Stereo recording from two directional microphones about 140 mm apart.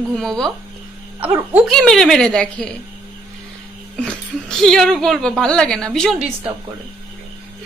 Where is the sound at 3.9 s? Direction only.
5° left (ahead or behind).